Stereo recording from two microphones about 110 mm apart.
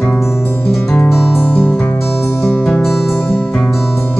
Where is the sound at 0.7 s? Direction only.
5° left (ahead or behind).